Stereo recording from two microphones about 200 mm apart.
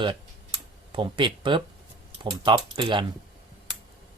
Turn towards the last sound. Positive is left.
turn(degrees=-25)  # may be behind; listen again after turning